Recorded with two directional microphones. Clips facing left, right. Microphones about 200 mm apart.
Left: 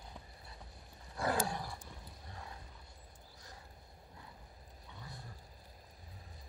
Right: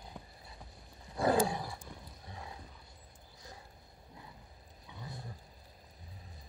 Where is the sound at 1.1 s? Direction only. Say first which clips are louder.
Right 6 dB; 20° right (ahead or behind).